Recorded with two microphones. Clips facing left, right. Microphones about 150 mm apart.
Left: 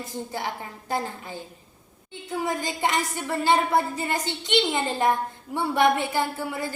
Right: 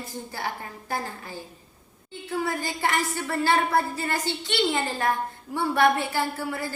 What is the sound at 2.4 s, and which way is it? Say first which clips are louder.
A woman's voice: left 1 dB; 20° left (ahead or behind).